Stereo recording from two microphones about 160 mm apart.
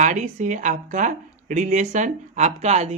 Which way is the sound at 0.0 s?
50° right (ahead or behind).